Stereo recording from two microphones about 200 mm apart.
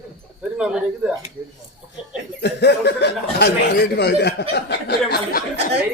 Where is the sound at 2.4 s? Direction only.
55° left (ahead or behind).